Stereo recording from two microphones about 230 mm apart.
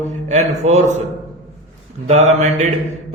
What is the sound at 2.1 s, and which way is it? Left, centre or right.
Mantra, right.